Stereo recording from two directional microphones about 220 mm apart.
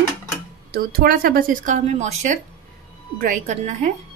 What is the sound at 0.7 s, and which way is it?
A woman's voice, 40° right (ahead or behind).